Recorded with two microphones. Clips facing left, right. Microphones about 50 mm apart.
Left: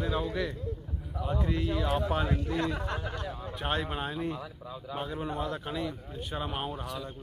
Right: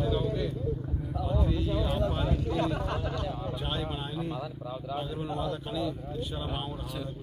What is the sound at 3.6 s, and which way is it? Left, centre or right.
A man's voice, left.